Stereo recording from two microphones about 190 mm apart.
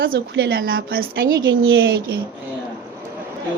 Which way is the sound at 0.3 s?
55° right (ahead or behind).